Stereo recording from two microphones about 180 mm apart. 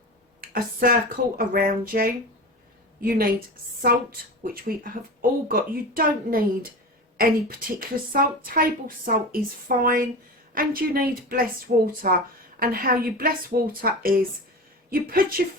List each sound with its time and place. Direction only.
0.4 s a woman's voice: 55° right (ahead or behind)
4.4 s a woman's voice: 55° right (ahead or behind)